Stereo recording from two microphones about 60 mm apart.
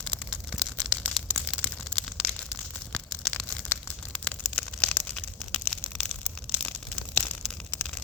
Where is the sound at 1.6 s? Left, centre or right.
Centre.